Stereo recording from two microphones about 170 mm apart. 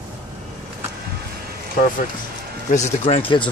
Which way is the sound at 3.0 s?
35° left (ahead or behind).